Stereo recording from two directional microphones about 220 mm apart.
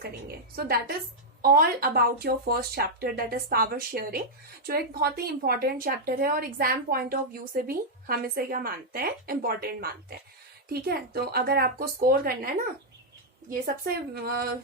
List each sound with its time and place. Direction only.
0.0 s speech: 45° right (ahead or behind)
13.5 s speech: 45° right (ahead or behind)